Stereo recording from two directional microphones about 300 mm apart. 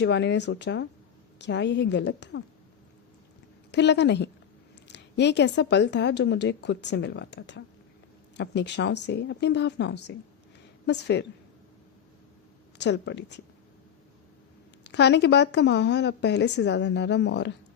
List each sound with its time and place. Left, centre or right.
0.0 s a woman's voice: left
3.7 s a woman's voice: left
12.8 s a woman's voice: left
14.8 s a woman's voice: left